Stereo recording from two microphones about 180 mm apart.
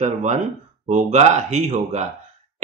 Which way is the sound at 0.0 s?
40° right (ahead or behind).